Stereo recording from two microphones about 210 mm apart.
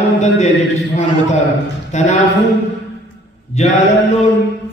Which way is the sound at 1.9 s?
35° left (ahead or behind).